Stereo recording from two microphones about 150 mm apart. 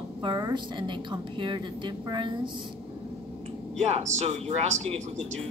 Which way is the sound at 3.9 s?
50° right (ahead or behind).